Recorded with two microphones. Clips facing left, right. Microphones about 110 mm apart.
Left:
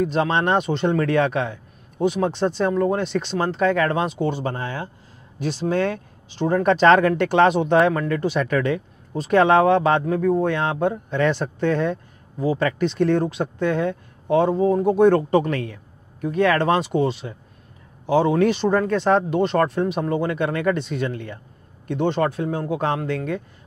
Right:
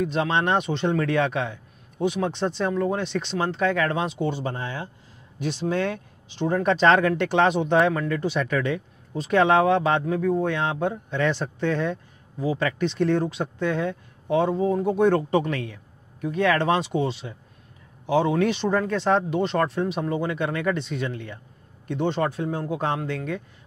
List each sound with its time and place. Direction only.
0.0 s speech: 45° left (ahead or behind)
5.4 s speech: 40° left (ahead or behind)
18.0 s speech: 40° left (ahead or behind)
21.8 s speech: 60° left (ahead or behind)